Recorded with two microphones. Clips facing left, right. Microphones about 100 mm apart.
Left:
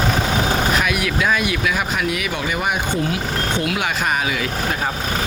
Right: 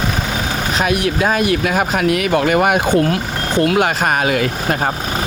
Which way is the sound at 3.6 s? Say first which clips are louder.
Right 12 dB; 45° right (ahead or behind).